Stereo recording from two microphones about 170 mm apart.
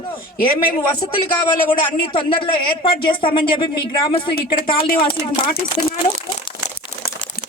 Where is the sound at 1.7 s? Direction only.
30° left (ahead or behind).